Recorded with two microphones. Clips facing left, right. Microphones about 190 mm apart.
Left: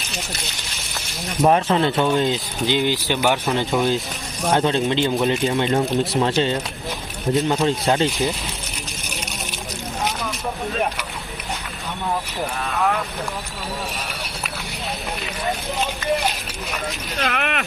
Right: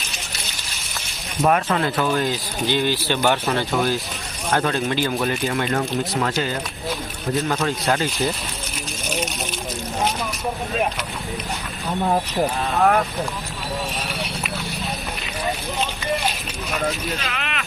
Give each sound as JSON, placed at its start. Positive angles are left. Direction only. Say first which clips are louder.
{"t": 1.4, "sound": "speech", "louder": "left 2 dB", "side_deg": 25}
{"t": 17.2, "sound": "speech", "louder": "left 6 dB", "side_deg": 55}